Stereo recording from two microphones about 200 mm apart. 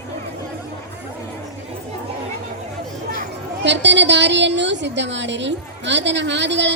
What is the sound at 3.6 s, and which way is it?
Speech, 65° right (ahead or behind).